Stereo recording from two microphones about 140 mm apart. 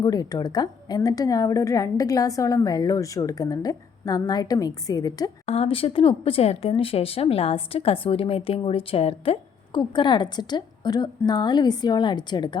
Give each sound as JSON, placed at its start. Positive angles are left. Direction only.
{"t": 0.0, "sound": "a woman's voice", "side_deg": 25}
{"t": 5.5, "sound": "speech", "side_deg": 40}